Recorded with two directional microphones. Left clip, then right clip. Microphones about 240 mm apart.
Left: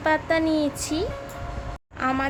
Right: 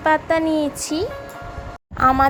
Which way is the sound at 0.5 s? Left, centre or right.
Left.